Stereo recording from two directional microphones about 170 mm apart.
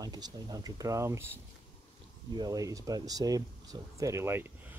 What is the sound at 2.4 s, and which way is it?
Speech, 20° right (ahead or behind).